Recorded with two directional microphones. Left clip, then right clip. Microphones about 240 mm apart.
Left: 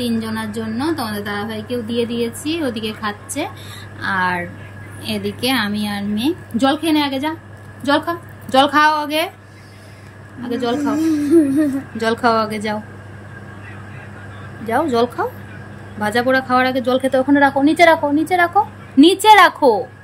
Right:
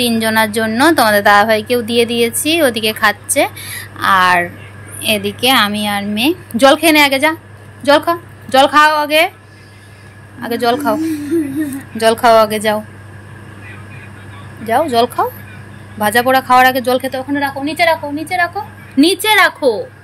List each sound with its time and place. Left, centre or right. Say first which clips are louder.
0.0 s a woman's voice: right 10 dB; centre
1.2 s a woman's voice: right 16 dB; right
1.5 s a woman's voice: right 11 dB; centre
10.4 s a woman's voice: right 6 dB; centre
14.7 s speech: right 4 dB; centre